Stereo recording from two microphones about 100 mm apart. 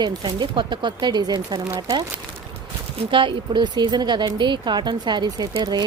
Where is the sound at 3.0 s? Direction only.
55° right (ahead or behind).